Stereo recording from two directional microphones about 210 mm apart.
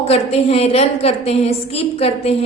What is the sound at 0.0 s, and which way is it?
A woman's voice, 30° left (ahead or behind).